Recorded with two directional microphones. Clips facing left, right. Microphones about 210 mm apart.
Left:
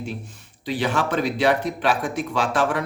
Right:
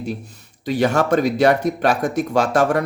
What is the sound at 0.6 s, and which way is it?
Speech, 45° right (ahead or behind).